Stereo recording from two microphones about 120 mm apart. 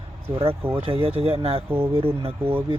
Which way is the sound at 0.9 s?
50° right (ahead or behind).